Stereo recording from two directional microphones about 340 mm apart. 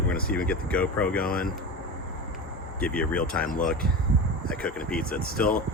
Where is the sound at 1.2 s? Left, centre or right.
Left.